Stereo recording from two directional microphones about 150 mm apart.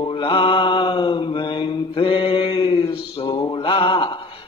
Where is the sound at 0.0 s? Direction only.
35° left (ahead or behind).